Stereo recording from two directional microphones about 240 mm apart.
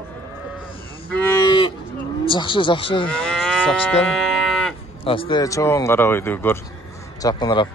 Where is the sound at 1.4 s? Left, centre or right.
Centre.